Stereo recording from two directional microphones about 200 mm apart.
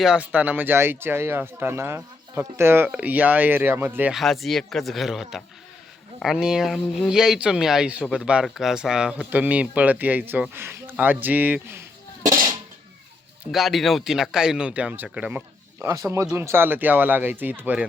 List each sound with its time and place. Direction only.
0.0 s speech: 5° right (ahead or behind)
12.2 s music: 15° right (ahead or behind)
13.4 s speech: centre (ahead or behind)